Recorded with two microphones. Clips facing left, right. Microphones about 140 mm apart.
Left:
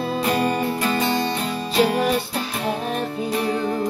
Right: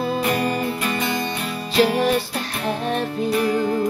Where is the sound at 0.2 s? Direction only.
30° left (ahead or behind).